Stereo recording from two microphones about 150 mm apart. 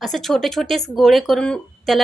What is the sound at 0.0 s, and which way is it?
A woman's voice, centre (ahead or behind).